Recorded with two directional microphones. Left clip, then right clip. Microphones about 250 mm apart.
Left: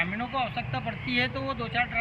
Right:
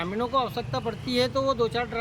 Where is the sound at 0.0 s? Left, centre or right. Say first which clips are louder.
Right 3 dB; centre.